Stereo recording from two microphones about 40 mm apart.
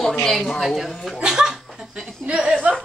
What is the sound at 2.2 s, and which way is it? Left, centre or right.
Speech, right.